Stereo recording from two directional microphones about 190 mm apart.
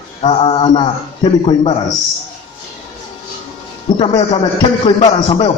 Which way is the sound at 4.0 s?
25° left (ahead or behind).